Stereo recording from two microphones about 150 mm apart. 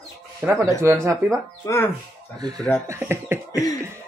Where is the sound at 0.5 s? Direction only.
20° right (ahead or behind).